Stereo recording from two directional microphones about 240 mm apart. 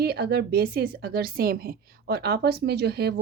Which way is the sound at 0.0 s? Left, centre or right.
Right.